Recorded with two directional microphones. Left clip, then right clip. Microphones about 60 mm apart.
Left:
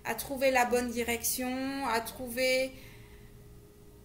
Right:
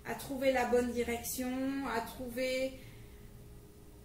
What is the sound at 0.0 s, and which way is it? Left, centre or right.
Speech, left.